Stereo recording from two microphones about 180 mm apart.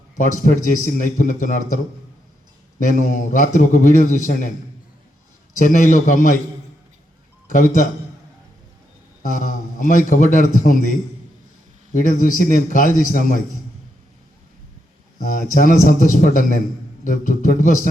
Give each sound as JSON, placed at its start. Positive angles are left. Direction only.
{"t": 0.2, "sound": "a man's voice", "side_deg": 45}
{"t": 5.5, "sound": "a man's voice", "side_deg": 45}
{"t": 7.4, "sound": "a man's voice", "side_deg": 45}
{"t": 9.4, "sound": "a sound", "side_deg": 45}
{"t": 10.1, "sound": "a man's voice", "side_deg": 45}
{"t": 11.9, "sound": "a man's voice", "side_deg": 45}
{"t": 15.2, "sound": "a man's voice", "side_deg": 45}